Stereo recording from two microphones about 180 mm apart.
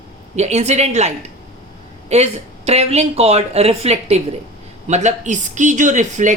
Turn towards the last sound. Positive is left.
turn(degrees=-45)  # may be behind; listen again after turning